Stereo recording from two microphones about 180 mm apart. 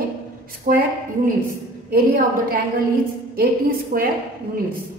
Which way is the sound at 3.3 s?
55° right (ahead or behind).